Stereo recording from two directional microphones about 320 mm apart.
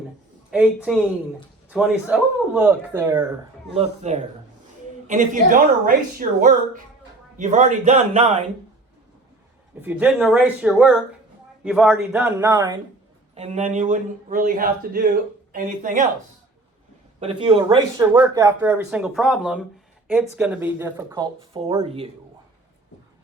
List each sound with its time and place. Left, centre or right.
0.5 s speech: centre
3.8 s a man's voice: right
9.8 s a man's voice: centre; by 16.0 s right
17.2 s speech: centre